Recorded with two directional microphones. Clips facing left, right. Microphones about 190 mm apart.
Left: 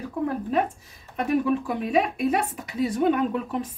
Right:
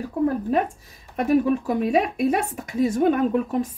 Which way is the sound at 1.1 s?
40° right (ahead or behind).